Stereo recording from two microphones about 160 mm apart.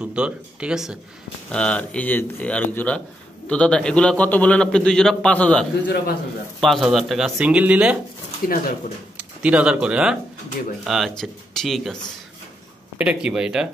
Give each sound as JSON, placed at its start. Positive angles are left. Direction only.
{"t": 0.0, "sound": "speech", "side_deg": -5}
{"t": 1.5, "sound": "a man's voice", "side_deg": 5}
{"t": 8.4, "sound": "speech", "side_deg": 60}
{"t": 9.1, "sound": "speech", "side_deg": -10}